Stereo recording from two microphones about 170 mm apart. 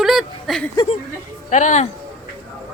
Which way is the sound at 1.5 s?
45° left (ahead or behind).